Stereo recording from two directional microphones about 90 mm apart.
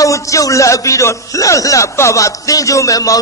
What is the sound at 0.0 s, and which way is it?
A man's voice, 35° left (ahead or behind).